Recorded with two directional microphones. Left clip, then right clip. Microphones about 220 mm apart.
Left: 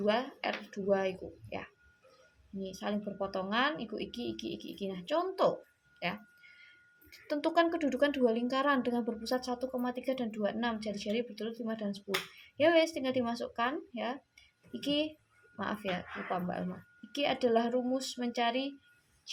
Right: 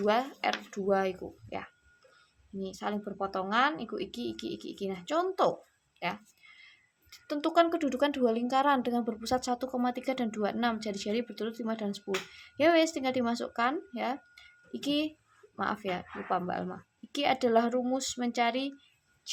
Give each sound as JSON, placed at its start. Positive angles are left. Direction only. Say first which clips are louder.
{"t": 0.0, "sound": "a woman's voice", "louder": "right 4 dB", "side_deg": -20}